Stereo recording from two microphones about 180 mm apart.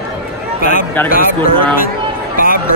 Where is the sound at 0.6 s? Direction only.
45° left (ahead or behind).